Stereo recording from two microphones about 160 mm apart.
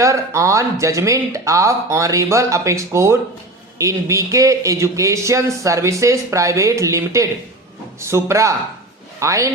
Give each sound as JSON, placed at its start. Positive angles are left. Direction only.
{"t": 0.0, "sound": "speech", "side_deg": -20}